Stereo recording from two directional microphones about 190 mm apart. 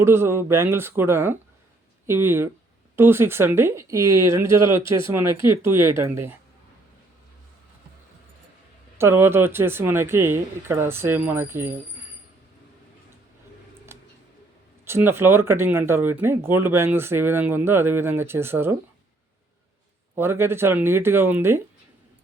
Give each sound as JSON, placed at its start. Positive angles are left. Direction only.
{"t": 0.0, "sound": "speech", "side_deg": -15}
{"t": 9.0, "sound": "speech", "side_deg": -10}
{"t": 13.9, "sound": "a sound", "side_deg": -15}
{"t": 14.8, "sound": "speech", "side_deg": -10}
{"t": 20.1, "sound": "speech", "side_deg": -15}